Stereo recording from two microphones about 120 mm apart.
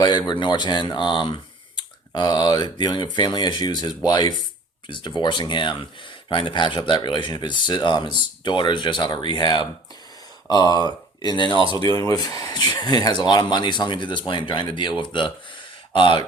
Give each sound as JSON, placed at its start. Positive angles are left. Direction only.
{"t": 0.0, "sound": "speech", "side_deg": 35}
{"t": 11.5, "sound": "speech", "side_deg": -45}
{"t": 11.9, "sound": "speech", "side_deg": 30}